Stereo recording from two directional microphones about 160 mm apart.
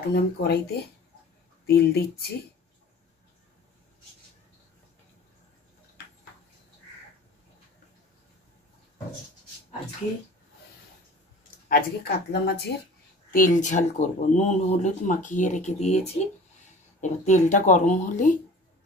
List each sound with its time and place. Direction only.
0.1 s speech: 80° left
1.7 s speech: 75° left (ahead or behind)
11.7 s speech: 85° left
13.3 s speech: 55° left (ahead or behind)